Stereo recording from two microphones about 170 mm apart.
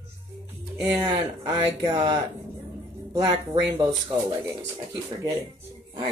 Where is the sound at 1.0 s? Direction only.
25° right (ahead or behind).